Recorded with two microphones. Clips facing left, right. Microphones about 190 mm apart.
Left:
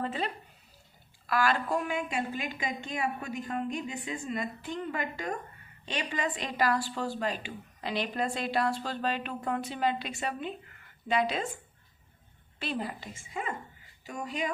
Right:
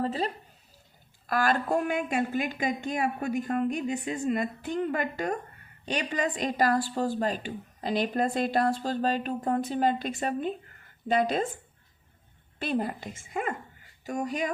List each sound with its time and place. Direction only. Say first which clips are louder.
0.0 s speech: right 4 dB; 35° right (ahead or behind)
1.3 s a woman's voice: right 2 dB; 45° right (ahead or behind)
12.5 s a woman's voice: right 5 dB; 50° right (ahead or behind)